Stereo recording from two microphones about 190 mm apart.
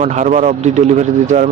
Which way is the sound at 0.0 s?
40° right (ahead or behind).